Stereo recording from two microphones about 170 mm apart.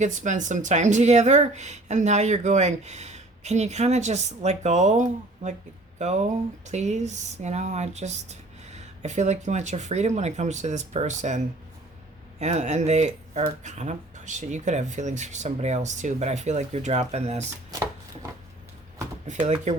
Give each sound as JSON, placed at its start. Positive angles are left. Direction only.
{"t": 0.0, "sound": "speech", "side_deg": -45}
{"t": 19.3, "sound": "speech", "side_deg": -45}